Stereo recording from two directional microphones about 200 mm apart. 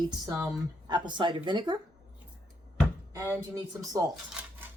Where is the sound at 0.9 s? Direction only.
20° right (ahead or behind).